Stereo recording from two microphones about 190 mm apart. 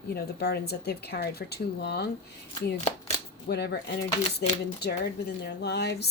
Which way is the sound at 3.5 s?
60° left (ahead or behind).